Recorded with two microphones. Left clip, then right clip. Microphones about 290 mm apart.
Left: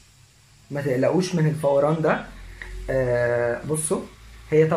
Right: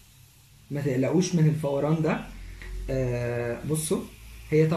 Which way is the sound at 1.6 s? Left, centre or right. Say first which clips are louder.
Left 9 dB; left.